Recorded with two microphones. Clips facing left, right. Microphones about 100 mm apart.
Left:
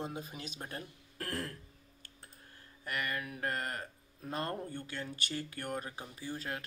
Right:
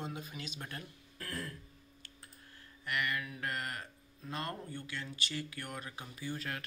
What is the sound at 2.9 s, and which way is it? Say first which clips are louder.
Speech: right 1 dB; 35° left (ahead or behind).